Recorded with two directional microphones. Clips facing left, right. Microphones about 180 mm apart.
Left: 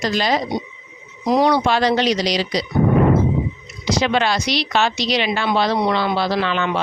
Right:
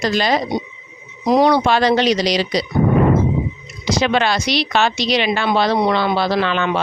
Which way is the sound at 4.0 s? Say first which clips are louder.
Right 2 dB; 65° right (ahead or behind).